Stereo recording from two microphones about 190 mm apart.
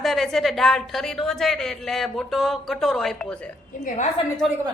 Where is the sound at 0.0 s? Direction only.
Centre (ahead or behind).